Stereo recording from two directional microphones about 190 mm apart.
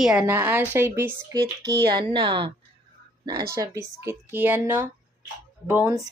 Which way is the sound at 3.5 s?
15° right (ahead or behind).